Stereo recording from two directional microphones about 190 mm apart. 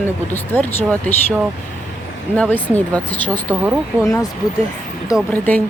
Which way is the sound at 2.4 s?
10° right (ahead or behind).